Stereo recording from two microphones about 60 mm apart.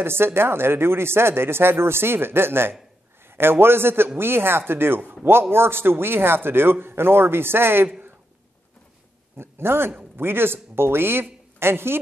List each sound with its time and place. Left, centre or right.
0.0 s speech: right
9.4 s speech: right